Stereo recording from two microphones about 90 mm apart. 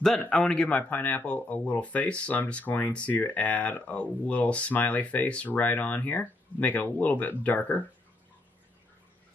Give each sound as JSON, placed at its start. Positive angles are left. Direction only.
{"t": 0.3, "sound": "speech", "side_deg": 10}